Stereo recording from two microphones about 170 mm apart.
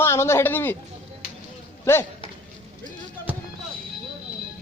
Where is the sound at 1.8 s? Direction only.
15° left (ahead or behind).